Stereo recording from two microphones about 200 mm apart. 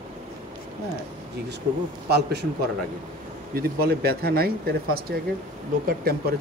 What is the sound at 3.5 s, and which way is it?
Speech, 50° right (ahead or behind).